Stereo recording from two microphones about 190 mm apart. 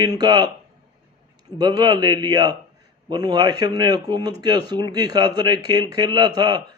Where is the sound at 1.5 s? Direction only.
20° right (ahead or behind).